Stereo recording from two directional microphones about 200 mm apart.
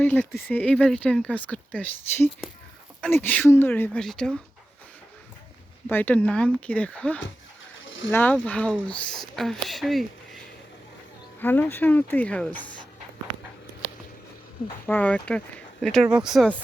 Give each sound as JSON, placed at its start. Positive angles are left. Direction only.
{"t": 0.0, "sound": "speech", "side_deg": 10}
{"t": 5.9, "sound": "speech", "side_deg": 10}
{"t": 7.9, "sound": "a sound", "side_deg": 70}
{"t": 8.1, "sound": "speech", "side_deg": 10}
{"t": 11.3, "sound": "speech", "side_deg": 10}
{"t": 14.8, "sound": "speech", "side_deg": 5}